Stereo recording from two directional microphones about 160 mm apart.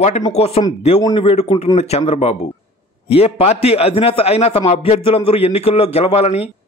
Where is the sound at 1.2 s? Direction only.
45° left (ahead or behind).